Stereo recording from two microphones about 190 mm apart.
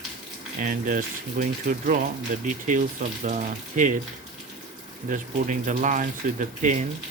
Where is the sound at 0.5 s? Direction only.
45° right (ahead or behind).